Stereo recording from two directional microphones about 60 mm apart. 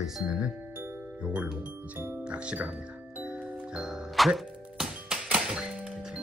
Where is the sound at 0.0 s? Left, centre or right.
Centre.